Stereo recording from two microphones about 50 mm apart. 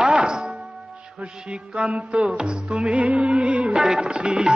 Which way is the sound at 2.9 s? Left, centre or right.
Right.